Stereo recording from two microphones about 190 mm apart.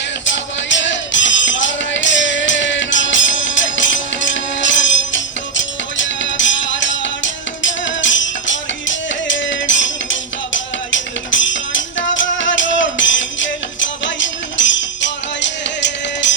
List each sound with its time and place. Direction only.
0.3 s music: 75° left (ahead or behind)